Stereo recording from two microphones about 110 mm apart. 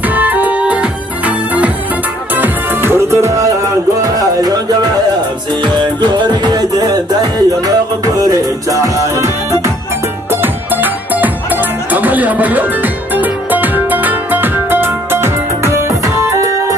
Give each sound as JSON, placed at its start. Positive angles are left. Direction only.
{"t": 0.1, "sound": "music", "side_deg": -15}
{"t": 5.6, "sound": "music", "side_deg": -45}